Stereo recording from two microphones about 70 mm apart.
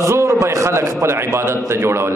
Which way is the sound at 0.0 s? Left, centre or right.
Right.